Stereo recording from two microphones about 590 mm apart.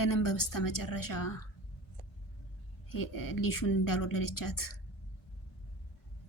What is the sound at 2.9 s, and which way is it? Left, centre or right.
Speech, left.